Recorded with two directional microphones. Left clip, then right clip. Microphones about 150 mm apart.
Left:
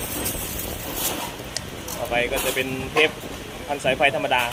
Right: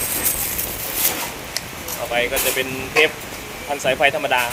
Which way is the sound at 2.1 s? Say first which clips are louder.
Right 3 dB; 20° right (ahead or behind).